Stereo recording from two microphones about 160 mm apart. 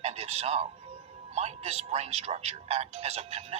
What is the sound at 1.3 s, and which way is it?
Speech, 45° right (ahead or behind).